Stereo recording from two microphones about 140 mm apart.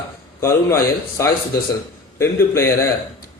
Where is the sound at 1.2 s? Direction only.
20° left (ahead or behind).